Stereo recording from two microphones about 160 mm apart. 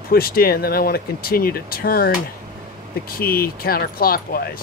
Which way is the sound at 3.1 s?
70° left (ahead or behind).